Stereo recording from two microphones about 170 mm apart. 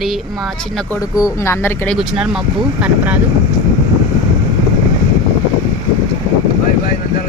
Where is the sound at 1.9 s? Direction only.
5° right (ahead or behind).